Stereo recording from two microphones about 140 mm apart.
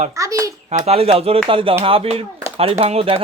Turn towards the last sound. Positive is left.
turn(degrees=-45)  # may be behind; listen again after turning